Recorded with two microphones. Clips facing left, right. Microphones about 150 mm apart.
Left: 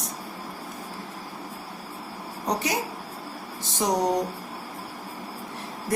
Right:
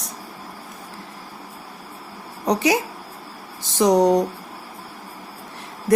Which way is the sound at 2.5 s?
90° right.